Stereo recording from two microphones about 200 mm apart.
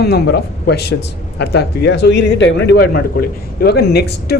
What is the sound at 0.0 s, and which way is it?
Speech, 55° left (ahead or behind).